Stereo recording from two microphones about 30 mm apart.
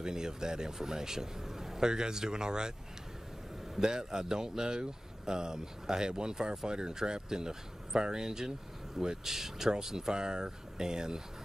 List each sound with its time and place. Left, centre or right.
0.0 s speech: right
3.8 s speech: right